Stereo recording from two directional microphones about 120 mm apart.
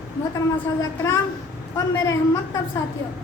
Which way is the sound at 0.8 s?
30° left (ahead or behind).